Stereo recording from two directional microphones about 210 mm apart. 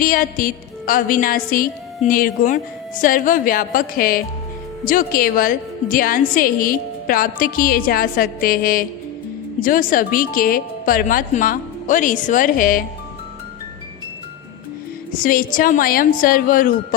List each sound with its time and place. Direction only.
0.0 s music: 40° left (ahead or behind)
4.9 s a woman's voice: 40° left (ahead or behind)
9.6 s music: 40° left (ahead or behind)
15.2 s music: 40° left (ahead or behind)